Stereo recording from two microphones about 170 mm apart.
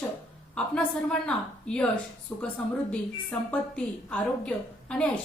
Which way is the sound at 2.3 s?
20° left (ahead or behind).